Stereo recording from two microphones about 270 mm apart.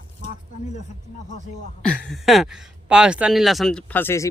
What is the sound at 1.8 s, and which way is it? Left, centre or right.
Speech, centre.